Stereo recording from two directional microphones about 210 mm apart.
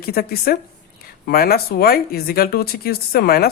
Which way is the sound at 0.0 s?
45° left (ahead or behind).